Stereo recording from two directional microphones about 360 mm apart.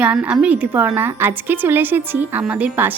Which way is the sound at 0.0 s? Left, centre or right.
Centre.